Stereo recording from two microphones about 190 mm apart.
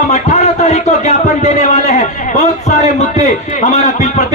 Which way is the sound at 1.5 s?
40° left (ahead or behind).